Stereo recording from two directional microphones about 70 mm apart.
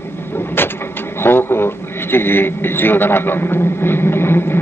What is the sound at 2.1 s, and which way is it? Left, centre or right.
A man's voice, left.